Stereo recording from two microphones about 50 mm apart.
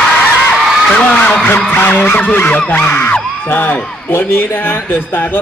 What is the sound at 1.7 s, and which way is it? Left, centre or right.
Vehicle, left.